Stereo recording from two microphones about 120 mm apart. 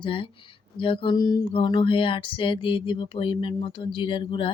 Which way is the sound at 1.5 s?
45° left (ahead or behind).